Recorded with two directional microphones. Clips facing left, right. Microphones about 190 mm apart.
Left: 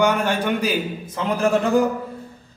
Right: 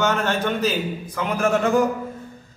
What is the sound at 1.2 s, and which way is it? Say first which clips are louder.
Speech: left 1 dB; 35° left (ahead or behind).